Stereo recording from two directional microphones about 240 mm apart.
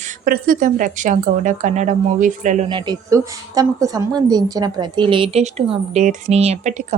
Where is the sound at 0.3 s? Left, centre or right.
Right.